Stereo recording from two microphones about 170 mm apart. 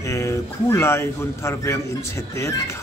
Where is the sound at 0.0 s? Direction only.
15° left (ahead or behind).